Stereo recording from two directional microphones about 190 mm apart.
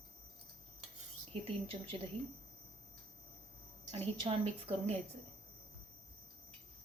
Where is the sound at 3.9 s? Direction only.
30° right (ahead or behind).